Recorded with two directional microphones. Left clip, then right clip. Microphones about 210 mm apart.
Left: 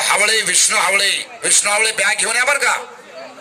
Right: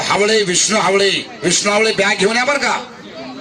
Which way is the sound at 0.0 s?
40° left (ahead or behind).